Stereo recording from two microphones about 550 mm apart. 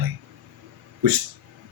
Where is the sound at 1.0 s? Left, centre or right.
Right.